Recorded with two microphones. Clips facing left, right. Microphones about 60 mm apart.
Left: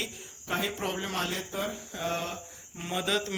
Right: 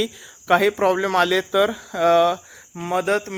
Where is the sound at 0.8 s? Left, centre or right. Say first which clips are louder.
Right 14 dB; right.